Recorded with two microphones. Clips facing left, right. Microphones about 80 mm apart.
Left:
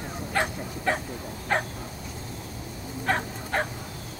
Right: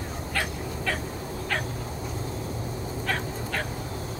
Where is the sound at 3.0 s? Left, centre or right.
Left.